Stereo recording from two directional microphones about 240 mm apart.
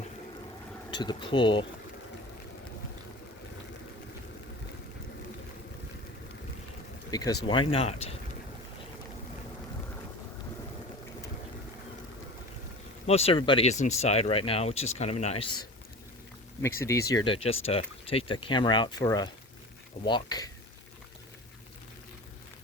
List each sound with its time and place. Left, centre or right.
0.9 s speech: centre
7.1 s speech: centre
13.1 s speech: left
16.6 s speech: centre